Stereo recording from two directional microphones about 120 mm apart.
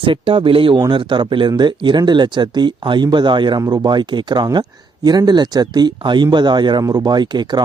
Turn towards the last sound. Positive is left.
turn(degrees=-35)  # may be behind; listen again after turning